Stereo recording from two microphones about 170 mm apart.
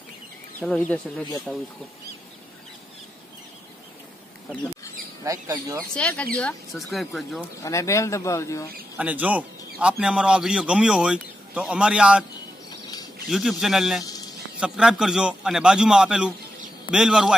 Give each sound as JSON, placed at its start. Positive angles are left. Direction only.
{"t": 0.6, "sound": "a man's voice", "side_deg": 10}
{"t": 5.2, "sound": "speech", "side_deg": -20}
{"t": 5.9, "sound": "a man's voice", "side_deg": 5}
{"t": 7.6, "sound": "speech", "side_deg": 20}
{"t": 8.9, "sound": "a man's voice", "side_deg": -10}
{"t": 13.3, "sound": "a man's voice", "side_deg": 0}